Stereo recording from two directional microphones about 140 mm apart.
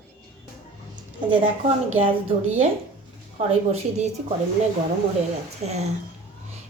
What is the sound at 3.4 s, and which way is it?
Speech, 45° right (ahead or behind).